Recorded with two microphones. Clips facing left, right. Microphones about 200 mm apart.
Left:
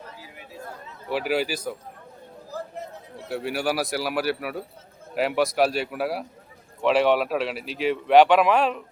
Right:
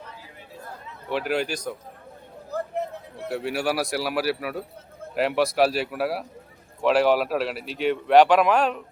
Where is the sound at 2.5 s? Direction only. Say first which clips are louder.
Right 6 dB; 60° right (ahead or behind).